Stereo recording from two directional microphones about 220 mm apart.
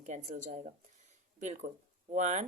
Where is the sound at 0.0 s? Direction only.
30° right (ahead or behind).